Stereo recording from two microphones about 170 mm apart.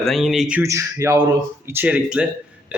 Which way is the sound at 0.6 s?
15° right (ahead or behind).